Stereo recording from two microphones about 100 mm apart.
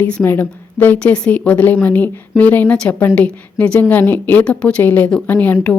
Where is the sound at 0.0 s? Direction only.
20° left (ahead or behind).